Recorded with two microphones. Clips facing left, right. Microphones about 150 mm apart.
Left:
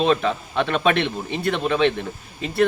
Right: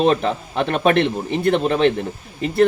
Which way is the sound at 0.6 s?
40° right (ahead or behind).